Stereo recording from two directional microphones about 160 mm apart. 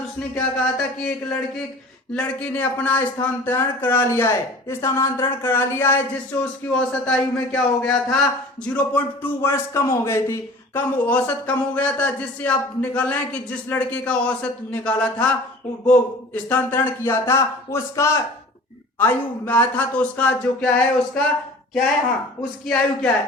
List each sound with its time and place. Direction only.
0.3 s a man's voice: 5° left (ahead or behind)
22.6 s a man's voice: 5° left (ahead or behind)